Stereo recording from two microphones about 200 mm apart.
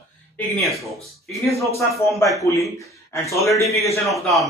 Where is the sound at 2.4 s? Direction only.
15° left (ahead or behind).